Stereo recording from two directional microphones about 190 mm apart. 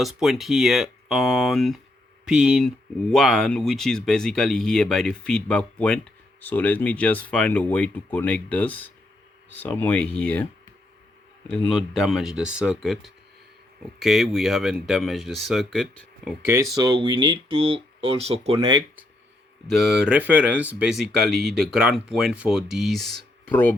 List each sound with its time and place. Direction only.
0.0 s speech: centre (ahead or behind)
11.9 s speech: centre (ahead or behind)
16.7 s speech: 20° right (ahead or behind)
19.7 s speech: centre (ahead or behind)